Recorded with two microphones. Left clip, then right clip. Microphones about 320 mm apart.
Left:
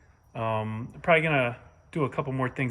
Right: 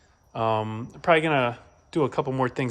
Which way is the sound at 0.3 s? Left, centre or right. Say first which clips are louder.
Right 5 dB; centre.